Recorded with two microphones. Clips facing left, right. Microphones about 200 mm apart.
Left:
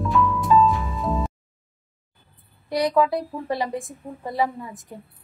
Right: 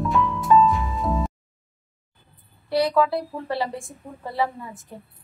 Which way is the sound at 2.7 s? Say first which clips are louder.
Even; 15° left (ahead or behind).